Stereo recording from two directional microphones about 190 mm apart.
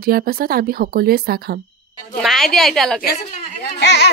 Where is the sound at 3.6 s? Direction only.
65° left (ahead or behind).